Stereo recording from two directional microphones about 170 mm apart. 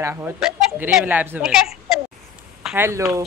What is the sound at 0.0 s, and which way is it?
Speech, 10° right (ahead or behind).